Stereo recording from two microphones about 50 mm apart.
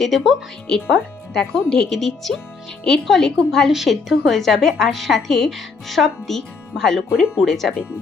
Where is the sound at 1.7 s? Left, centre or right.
Centre.